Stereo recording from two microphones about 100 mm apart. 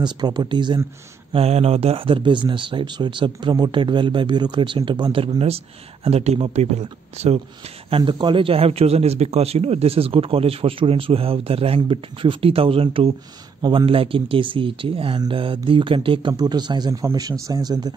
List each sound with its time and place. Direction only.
0.0 s speech: 50° right (ahead or behind)
1.3 s speech: 90° right; by 5.2 s 50° right (ahead or behind)
6.0 s speech: 90° right
7.9 s speech: 55° right (ahead or behind); by 13.1 s 70° right (ahead or behind)
13.6 s speech: 55° right (ahead or behind)